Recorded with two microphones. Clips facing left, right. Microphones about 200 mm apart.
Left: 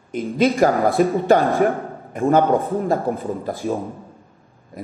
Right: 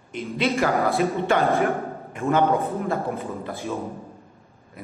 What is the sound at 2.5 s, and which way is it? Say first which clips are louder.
Speech: left 4 dB; 15° left (ahead or behind).